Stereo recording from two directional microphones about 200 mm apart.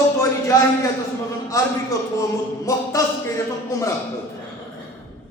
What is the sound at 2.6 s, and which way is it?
A man's voice, 15° left (ahead or behind).